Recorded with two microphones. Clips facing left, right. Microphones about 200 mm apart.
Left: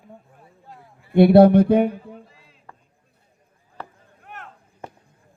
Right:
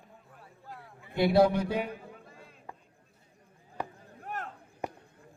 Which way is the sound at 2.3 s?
50° right (ahead or behind).